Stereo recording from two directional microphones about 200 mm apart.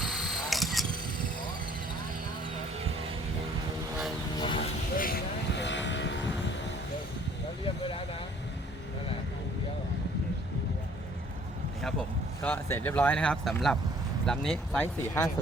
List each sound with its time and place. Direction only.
0.0 s single-lens reflex camera: centre (ahead or behind)
4.4 s vehicle: 25° left (ahead or behind)
4.9 s vehicle: 45° left (ahead or behind); by 6.1 s 65° left (ahead or behind)
11.8 s a sound: 5° left (ahead or behind)
14.3 s speech: 5° left (ahead or behind)